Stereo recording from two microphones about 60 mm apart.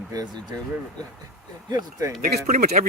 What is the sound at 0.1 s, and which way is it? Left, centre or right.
Speech, right.